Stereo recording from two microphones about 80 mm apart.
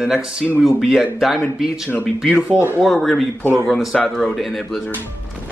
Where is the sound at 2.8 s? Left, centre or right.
Centre.